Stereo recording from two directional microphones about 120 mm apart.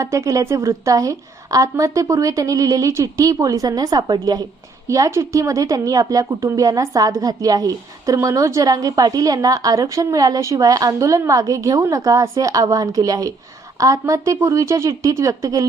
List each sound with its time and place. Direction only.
0.0 s a woman's voice: 25° right (ahead or behind)